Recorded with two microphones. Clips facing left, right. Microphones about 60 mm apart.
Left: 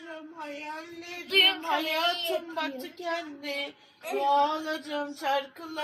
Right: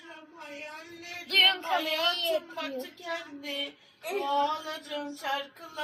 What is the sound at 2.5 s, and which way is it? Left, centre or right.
A woman's voice, left.